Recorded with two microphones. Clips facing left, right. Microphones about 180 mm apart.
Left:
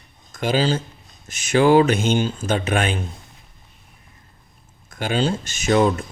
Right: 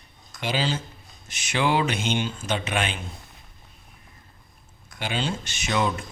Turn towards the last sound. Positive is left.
turn(degrees=40)  # may be behind; listen again after turning